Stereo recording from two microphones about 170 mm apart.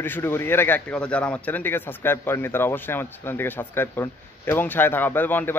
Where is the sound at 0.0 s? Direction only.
15° left (ahead or behind).